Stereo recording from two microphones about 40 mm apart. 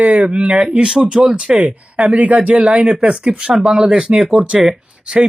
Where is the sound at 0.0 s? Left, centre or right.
Right.